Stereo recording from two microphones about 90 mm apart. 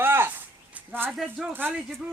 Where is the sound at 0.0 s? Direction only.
25° right (ahead or behind).